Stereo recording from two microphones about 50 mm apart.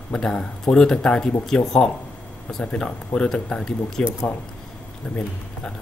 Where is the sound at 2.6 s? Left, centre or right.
Left.